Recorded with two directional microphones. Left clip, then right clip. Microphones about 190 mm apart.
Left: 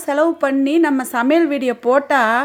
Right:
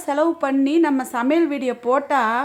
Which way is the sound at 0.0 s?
5° left (ahead or behind).